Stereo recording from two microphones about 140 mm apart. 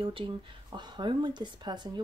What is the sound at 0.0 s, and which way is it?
Speech, 40° right (ahead or behind).